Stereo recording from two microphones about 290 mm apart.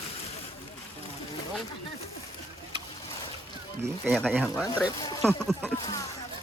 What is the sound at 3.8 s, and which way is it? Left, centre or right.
Speech, centre.